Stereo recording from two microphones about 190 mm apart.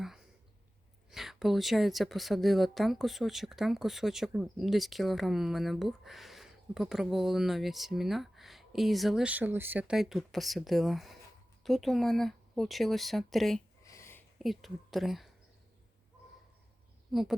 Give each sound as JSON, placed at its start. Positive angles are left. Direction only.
{"t": 1.1, "sound": "a woman's voice", "side_deg": 0}
{"t": 13.8, "sound": "a sound", "side_deg": 15}
{"t": 14.3, "sound": "a woman's voice", "side_deg": 0}
{"t": 17.1, "sound": "speech", "side_deg": 0}